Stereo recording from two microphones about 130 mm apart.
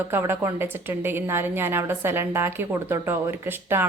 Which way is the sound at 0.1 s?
20° right (ahead or behind).